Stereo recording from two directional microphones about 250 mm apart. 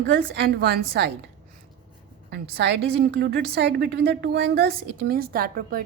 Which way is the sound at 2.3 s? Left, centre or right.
Right.